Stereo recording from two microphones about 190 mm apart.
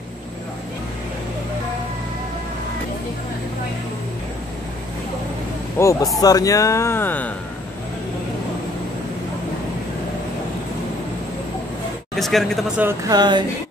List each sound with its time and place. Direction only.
5.8 s speech: 15° left (ahead or behind)
12.2 s speech: centre (ahead or behind)
12.8 s speech: 20° right (ahead or behind)